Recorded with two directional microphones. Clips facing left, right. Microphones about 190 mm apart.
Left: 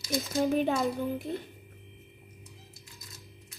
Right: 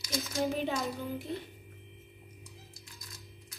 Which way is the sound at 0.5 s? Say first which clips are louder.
Left 6 dB; 55° left (ahead or behind).